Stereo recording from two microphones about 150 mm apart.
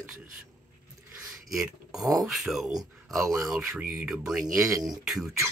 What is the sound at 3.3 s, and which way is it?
Speech, 20° right (ahead or behind).